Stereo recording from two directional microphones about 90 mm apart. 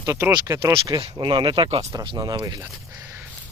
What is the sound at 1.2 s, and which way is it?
Speech, 55° right (ahead or behind).